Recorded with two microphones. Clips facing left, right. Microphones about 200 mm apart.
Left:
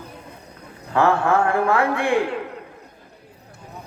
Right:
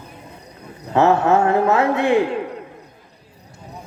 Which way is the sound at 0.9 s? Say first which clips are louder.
Right 3 dB; 25° right (ahead or behind).